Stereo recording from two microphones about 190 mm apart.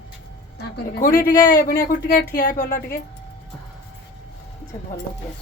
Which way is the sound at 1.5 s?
45° left (ahead or behind).